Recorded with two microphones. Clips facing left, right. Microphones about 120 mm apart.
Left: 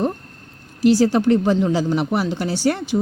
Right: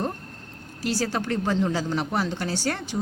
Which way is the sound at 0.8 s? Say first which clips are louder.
Left 11 dB; 15° left (ahead or behind).